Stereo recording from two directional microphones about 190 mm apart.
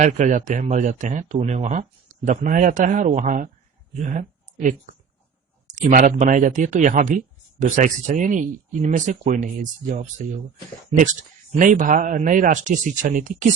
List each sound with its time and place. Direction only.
0.0 s speech: 40° right (ahead or behind)
3.9 s a sound: 40° right (ahead or behind)
5.6 s speech: 40° right (ahead or behind)
11.5 s speech: 45° right (ahead or behind)